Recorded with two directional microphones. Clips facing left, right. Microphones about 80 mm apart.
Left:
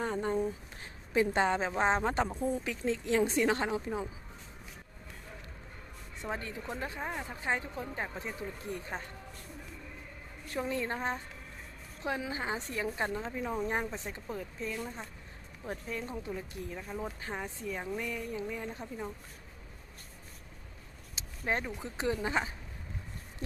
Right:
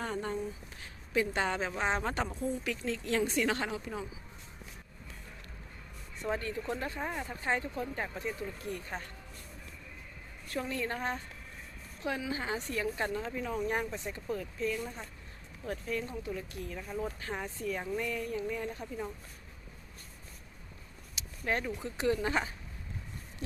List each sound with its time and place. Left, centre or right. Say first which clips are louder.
0.0 s a sound: left 3 dB; centre
1.1 s a woman's voice: left 3 dB; left
6.2 s speech: right 4 dB; centre
10.5 s a woman's voice: left 1 dB; left
21.2 s speech: even; left